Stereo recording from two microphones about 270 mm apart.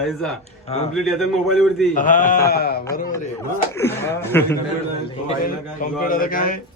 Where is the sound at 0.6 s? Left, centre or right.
Left.